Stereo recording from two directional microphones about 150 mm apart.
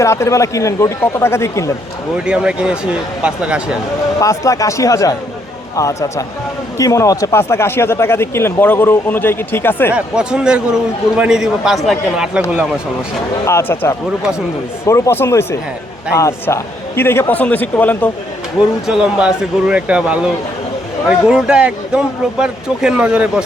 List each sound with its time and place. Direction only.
0.0 s speech: 20° left (ahead or behind)
2.2 s speech: 5° right (ahead or behind)
4.2 s speech: 20° left (ahead or behind)
9.9 s a man's voice: 5° right (ahead or behind)
13.4 s speech: 15° left (ahead or behind)
18.9 s a man's voice: 5° right (ahead or behind)